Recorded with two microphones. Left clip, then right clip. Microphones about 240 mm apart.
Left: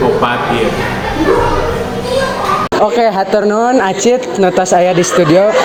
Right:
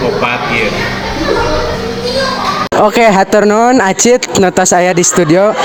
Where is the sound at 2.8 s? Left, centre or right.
Right.